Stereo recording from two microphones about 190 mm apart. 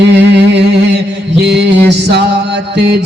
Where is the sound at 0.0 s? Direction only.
65° right (ahead or behind).